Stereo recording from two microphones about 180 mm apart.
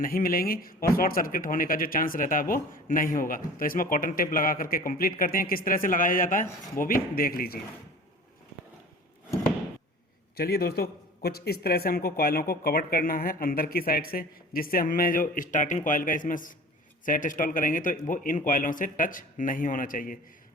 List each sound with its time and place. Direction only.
0.0 s speech: 50° left (ahead or behind)
10.3 s a man's voice: 60° left (ahead or behind)